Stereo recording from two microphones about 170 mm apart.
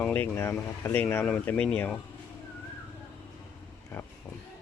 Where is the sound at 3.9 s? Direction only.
10° left (ahead or behind).